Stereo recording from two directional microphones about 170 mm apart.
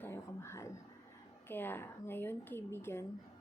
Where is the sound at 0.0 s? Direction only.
15° left (ahead or behind).